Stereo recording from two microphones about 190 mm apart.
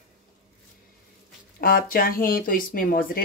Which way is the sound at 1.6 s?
50° left (ahead or behind).